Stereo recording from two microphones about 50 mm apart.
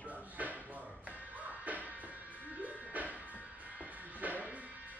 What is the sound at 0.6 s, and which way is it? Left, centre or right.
Music, right.